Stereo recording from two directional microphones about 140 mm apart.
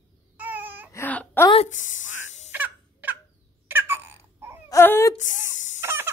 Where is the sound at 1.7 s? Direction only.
65° left (ahead or behind).